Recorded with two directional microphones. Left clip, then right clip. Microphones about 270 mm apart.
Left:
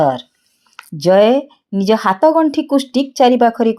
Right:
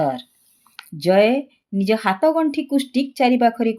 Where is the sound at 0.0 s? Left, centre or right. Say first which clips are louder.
Left 7 dB; centre.